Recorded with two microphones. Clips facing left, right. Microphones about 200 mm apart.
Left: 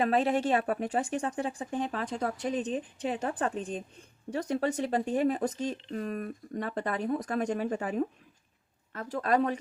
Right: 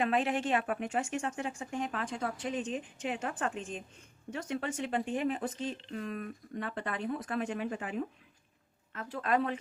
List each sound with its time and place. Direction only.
0.0 s speech: 35° left (ahead or behind)